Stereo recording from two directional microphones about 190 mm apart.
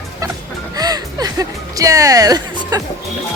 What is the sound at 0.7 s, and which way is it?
Music, 20° right (ahead or behind).